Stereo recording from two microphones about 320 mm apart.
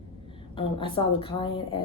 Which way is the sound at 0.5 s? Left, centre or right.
Centre.